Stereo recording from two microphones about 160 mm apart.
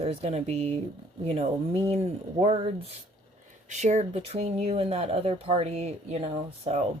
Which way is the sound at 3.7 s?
45° right (ahead or behind).